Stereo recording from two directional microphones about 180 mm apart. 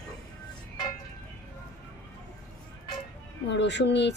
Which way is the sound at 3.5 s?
75° left (ahead or behind).